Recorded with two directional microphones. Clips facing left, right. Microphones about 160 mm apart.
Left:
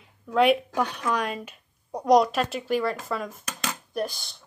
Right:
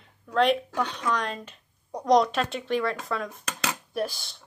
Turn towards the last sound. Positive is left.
turn(degrees=0)  # may be behind; listen again after turning